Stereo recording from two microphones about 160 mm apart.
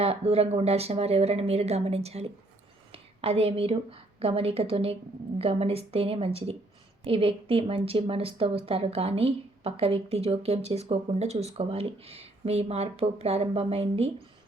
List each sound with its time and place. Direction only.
0.0 s a woman's voice: 40° right (ahead or behind)